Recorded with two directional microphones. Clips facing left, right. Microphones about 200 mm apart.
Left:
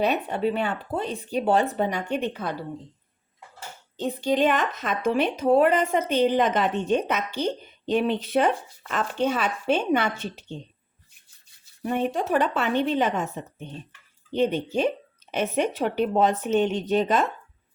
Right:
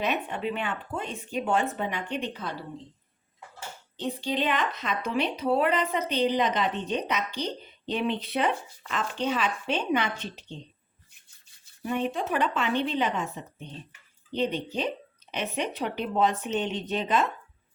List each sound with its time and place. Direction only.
0.0 s speech: 35° left (ahead or behind)
3.9 s speech: 45° left (ahead or behind)
11.8 s speech: 45° left (ahead or behind)